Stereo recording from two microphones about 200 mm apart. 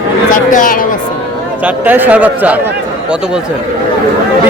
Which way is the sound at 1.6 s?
10° right (ahead or behind).